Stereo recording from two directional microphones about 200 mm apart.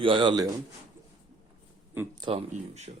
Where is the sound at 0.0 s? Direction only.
25° right (ahead or behind).